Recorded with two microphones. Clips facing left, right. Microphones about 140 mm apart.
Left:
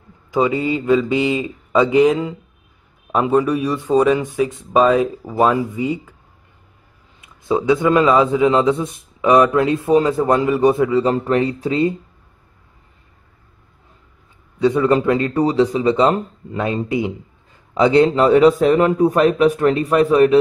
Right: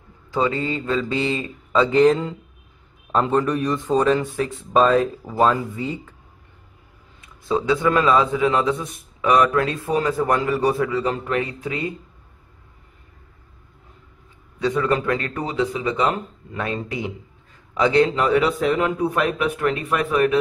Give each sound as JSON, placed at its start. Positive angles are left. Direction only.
{"t": 0.3, "sound": "speech", "side_deg": 15}
{"t": 7.2, "sound": "a man's voice", "side_deg": 20}
{"t": 14.6, "sound": "a man's voice", "side_deg": 20}
{"t": 15.4, "sound": "a man's voice", "side_deg": 35}
{"t": 16.5, "sound": "a man's voice", "side_deg": 20}